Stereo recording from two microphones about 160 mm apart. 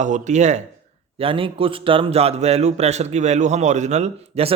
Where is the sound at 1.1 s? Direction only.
35° right (ahead or behind).